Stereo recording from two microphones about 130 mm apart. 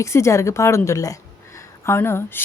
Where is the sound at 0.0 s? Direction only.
20° left (ahead or behind).